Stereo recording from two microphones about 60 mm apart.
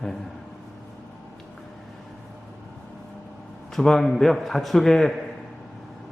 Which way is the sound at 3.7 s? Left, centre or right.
Centre.